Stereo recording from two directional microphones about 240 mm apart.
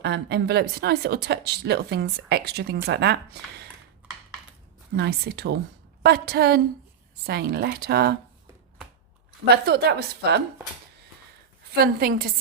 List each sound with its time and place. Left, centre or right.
0.0 s speech: right
4.9 s speech: right
9.6 s speech: right
11.7 s speech: right